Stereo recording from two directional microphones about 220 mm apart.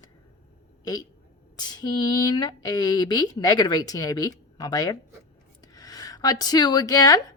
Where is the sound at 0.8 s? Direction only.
15° left (ahead or behind).